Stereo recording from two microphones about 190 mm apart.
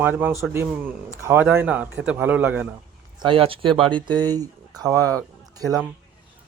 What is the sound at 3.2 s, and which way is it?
Speech, 25° right (ahead or behind).